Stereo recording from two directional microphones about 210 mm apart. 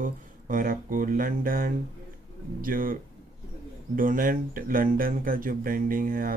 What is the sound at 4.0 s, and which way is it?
Speech, 40° right (ahead or behind).